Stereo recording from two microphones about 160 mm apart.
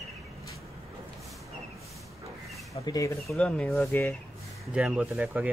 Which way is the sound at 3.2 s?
5° left (ahead or behind).